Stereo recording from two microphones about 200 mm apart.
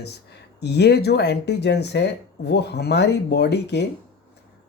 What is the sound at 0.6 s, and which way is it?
Speech, 55° left (ahead or behind).